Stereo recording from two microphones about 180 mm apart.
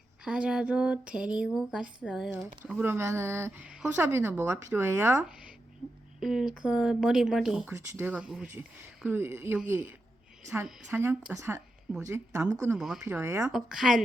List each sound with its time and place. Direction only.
0.3 s speech: 5° right (ahead or behind)
2.8 s speech: 15° right (ahead or behind)
6.1 s speech: centre (ahead or behind)
12.7 s speech: centre (ahead or behind)
13.1 s speech: 15° right (ahead or behind)
13.5 s speech: 5° right (ahead or behind)